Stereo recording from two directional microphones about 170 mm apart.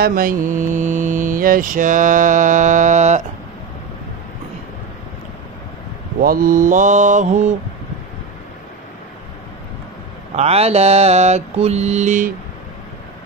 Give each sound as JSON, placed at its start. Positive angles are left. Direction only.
{"t": 0.0, "sound": "mantra", "side_deg": -55}
{"t": 6.2, "sound": "mantra", "side_deg": -55}
{"t": 10.3, "sound": "mantra", "side_deg": -40}